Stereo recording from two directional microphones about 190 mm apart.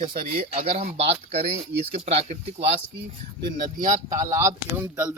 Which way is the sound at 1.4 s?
60° right (ahead or behind).